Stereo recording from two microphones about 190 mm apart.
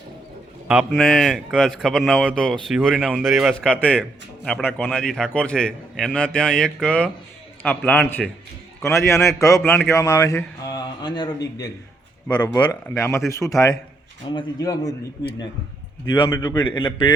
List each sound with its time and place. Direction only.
0.7 s a man's voice: 5° right (ahead or behind); by 9.6 s 15° left (ahead or behind)
9.6 s speech: 5° left (ahead or behind)
9.9 s a man's voice: 15° left (ahead or behind)
12.8 s a man's voice: 15° left (ahead or behind)
16.2 s a man's voice: 20° left (ahead or behind)